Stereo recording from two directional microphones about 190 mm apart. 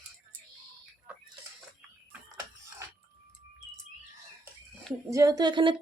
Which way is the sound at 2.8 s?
15° right (ahead or behind).